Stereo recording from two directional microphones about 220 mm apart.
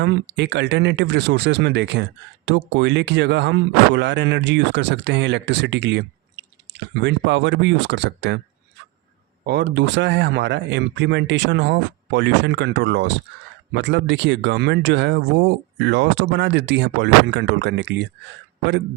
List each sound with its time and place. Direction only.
0.0 s speech: 50° right (ahead or behind)
9.5 s speech: 50° right (ahead or behind)